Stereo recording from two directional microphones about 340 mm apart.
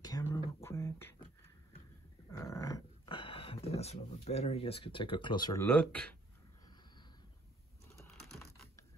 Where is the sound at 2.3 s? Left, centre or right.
Centre.